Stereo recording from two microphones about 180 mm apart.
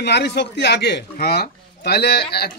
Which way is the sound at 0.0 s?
70° left (ahead or behind).